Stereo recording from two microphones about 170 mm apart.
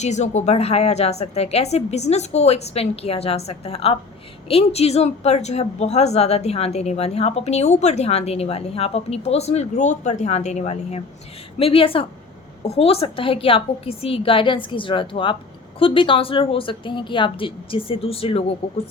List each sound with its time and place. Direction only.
0.0 s speech: 40° left (ahead or behind)